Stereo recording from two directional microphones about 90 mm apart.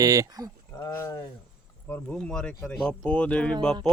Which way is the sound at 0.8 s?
35° left (ahead or behind).